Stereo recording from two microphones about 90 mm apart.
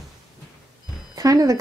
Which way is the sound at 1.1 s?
40° right (ahead or behind).